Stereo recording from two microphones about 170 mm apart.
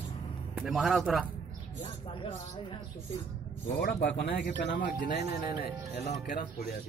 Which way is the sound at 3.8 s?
75° left (ahead or behind).